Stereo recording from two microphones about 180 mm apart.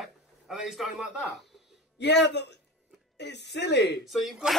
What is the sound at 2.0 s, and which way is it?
Speech, 70° left (ahead or behind).